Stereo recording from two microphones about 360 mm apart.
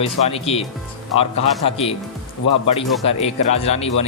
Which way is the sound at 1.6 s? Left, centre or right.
Centre.